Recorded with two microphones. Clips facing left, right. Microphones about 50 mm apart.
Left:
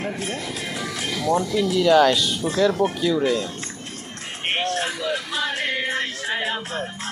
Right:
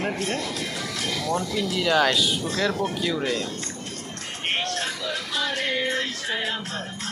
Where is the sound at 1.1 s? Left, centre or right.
Centre.